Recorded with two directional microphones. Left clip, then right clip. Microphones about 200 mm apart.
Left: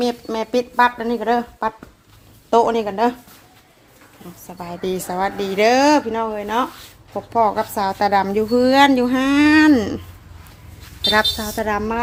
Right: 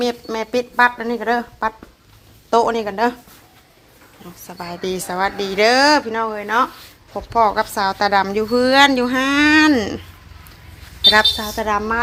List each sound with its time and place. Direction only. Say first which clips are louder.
0.0 s a woman's voice: even; 15° left (ahead or behind)
4.4 s a woman's voice: even; 5° left (ahead or behind)
11.0 s a woman's voice: right 4 dB; 10° left (ahead or behind)